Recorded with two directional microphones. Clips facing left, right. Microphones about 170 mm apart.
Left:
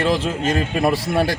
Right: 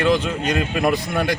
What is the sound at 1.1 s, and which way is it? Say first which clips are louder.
Speech: left 2 dB; 30° left (ahead or behind).